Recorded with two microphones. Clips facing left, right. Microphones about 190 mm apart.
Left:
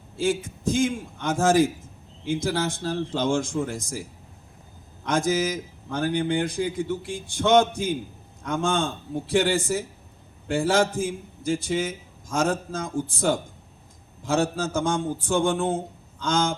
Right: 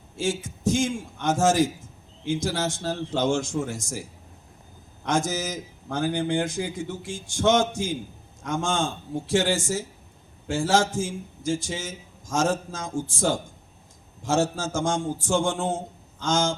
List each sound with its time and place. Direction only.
0.2 s a man's voice: 60° left (ahead or behind)
5.0 s a man's voice: 60° left (ahead or behind)